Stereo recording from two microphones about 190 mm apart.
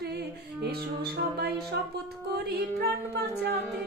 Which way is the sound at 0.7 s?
55° right (ahead or behind).